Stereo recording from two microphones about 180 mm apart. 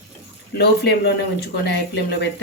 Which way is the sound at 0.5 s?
65° left (ahead or behind).